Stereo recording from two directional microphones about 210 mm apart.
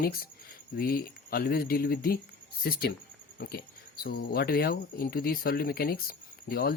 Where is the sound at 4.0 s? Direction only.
45° left (ahead or behind).